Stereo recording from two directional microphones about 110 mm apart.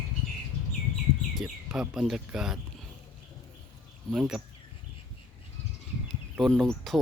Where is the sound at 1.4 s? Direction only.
5° right (ahead or behind).